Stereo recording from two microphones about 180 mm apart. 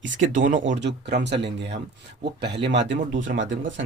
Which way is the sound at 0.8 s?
75° right (ahead or behind).